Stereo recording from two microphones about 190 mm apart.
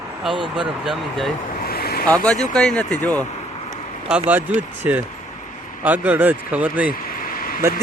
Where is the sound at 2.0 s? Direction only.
5° left (ahead or behind).